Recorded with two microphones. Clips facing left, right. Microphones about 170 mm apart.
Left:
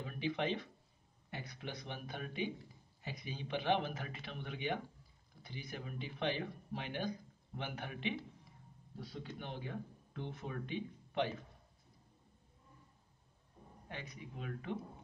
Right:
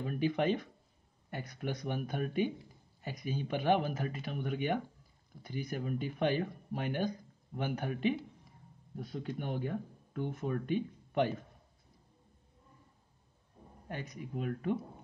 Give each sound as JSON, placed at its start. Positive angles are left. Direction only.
{"t": 0.0, "sound": "speech", "side_deg": -45}
{"t": 8.9, "sound": "speech", "side_deg": -55}
{"t": 13.8, "sound": "speech", "side_deg": -45}